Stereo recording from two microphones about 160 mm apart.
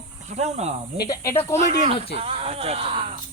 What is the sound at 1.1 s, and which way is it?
Speech, 20° left (ahead or behind).